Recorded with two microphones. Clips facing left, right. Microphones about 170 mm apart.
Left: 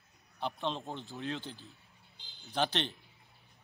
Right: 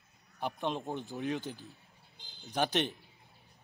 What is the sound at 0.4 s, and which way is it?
Speech, 15° right (ahead or behind).